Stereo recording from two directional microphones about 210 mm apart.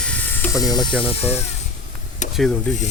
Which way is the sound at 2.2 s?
35° left (ahead or behind).